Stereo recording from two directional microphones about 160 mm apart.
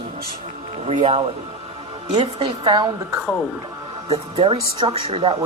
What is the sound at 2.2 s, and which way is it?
A woman's voice, 35° right (ahead or behind).